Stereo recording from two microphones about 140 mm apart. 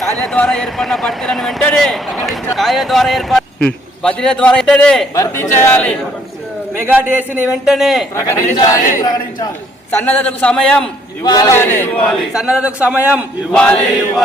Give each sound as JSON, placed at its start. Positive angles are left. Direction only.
{"t": 0.0, "sound": "a man's voice", "side_deg": 5}
{"t": 5.1, "sound": "a man's voice", "side_deg": 20}
{"t": 6.7, "sound": "a man's voice", "side_deg": -15}
{"t": 8.1, "sound": "speech", "side_deg": 20}
{"t": 9.9, "sound": "a man's voice", "side_deg": 15}
{"t": 11.2, "sound": "speech", "side_deg": 25}
{"t": 11.5, "sound": "a man's voice", "side_deg": 15}
{"t": 12.3, "sound": "a man's voice", "side_deg": -5}
{"t": 13.5, "sound": "a man's voice", "side_deg": 5}